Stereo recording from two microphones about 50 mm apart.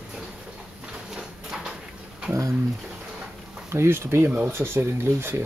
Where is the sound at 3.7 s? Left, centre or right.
Right.